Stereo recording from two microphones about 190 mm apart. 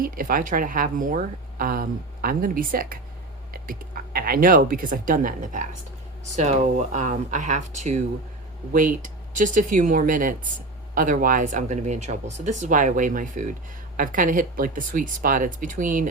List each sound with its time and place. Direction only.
0.0 s a woman's voice: 45° right (ahead or behind)